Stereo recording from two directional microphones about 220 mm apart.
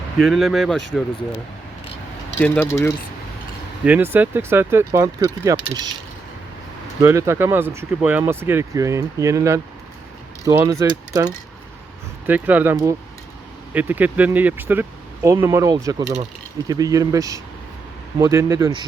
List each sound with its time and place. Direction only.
0.2 s speech: centre (ahead or behind)
2.4 s speech: 10° left (ahead or behind)
3.8 s speech: 10° right (ahead or behind)
7.0 s speech: 15° right (ahead or behind)